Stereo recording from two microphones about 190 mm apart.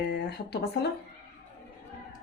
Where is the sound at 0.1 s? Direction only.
60° left (ahead or behind).